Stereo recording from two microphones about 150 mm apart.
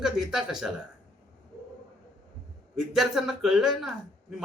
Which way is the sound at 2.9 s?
5° right (ahead or behind).